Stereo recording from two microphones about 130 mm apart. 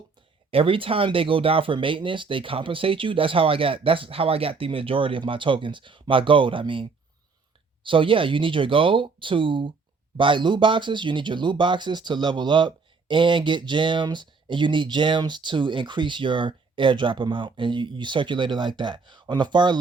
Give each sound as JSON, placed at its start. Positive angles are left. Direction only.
{"t": 0.5, "sound": "speech", "side_deg": -45}
{"t": 7.9, "sound": "speech", "side_deg": -40}